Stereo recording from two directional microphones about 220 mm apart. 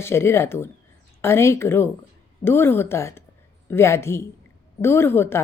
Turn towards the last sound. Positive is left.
turn(degrees=10)  # may be behind; listen again after turning